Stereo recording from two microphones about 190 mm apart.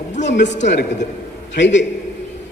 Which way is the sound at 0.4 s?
40° left (ahead or behind).